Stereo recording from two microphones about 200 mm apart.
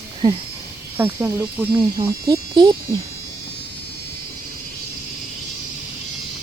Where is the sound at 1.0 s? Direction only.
10° right (ahead or behind).